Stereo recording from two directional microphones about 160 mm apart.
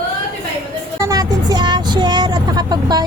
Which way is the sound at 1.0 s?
20° right (ahead or behind).